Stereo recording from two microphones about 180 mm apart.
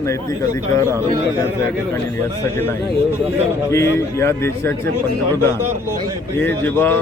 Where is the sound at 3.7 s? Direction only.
15° left (ahead or behind).